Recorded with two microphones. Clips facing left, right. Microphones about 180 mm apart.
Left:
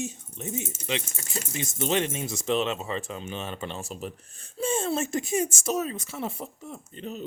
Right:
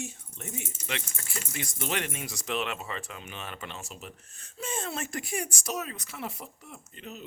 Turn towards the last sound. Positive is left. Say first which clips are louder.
# left 7 dB
turn(degrees=30)  # may be behind; listen again after turning